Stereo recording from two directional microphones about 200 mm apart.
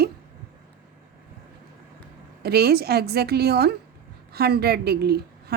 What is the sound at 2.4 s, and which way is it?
A woman's voice, 50° right (ahead or behind).